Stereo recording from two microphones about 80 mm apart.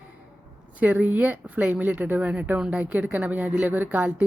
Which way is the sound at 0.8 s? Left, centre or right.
Centre.